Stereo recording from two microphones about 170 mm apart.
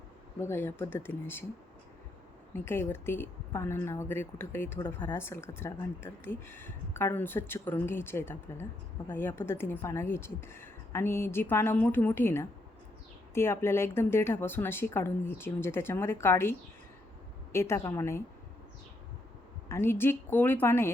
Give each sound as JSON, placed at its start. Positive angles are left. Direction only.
{"t": 0.4, "sound": "speech", "side_deg": 15}
{"t": 2.5, "sound": "speech", "side_deg": 15}
{"t": 19.6, "sound": "speech", "side_deg": 15}